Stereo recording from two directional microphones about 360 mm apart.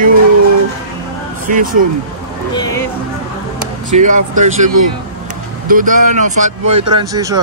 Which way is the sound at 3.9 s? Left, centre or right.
Right.